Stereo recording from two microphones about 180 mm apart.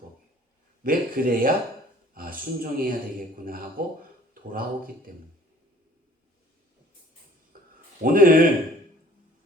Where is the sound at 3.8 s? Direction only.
50° right (ahead or behind).